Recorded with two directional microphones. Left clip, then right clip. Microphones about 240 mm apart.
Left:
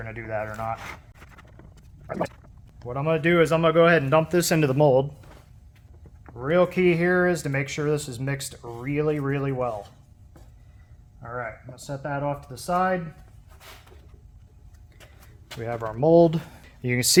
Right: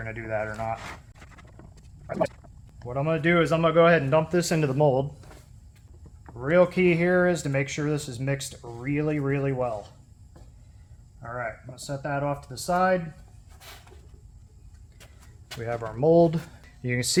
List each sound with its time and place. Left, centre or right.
0.0 s speech: centre
1.4 s dog: centre
2.8 s speech: left
6.2 s speech: centre
11.2 s speech: centre
15.5 s speech: left